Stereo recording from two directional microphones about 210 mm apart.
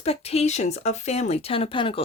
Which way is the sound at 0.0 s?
30° left (ahead or behind).